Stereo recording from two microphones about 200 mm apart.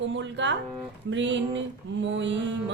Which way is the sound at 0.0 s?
65° right (ahead or behind).